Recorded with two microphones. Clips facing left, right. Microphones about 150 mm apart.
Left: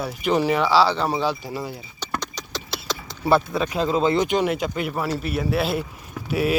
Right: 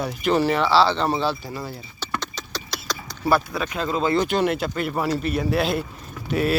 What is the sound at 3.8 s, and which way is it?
Speech, 20° left (ahead or behind).